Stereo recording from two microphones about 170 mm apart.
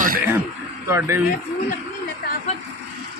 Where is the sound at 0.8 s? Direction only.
15° right (ahead or behind).